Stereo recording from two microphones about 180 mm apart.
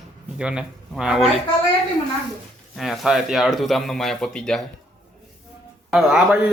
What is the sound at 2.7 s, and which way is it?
Speech, centre (ahead or behind).